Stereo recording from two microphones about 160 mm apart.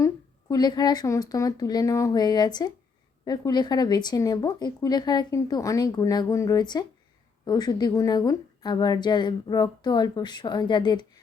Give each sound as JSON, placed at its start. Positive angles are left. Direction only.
{"t": 0.5, "sound": "speech", "side_deg": 25}